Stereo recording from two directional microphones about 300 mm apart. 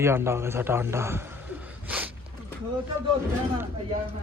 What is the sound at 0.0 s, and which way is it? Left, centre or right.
A man's voice, centre.